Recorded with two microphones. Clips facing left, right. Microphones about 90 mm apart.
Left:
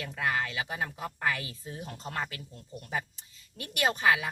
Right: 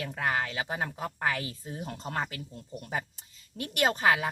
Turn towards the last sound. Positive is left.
turn(degrees=-35)  # may be behind; listen again after turning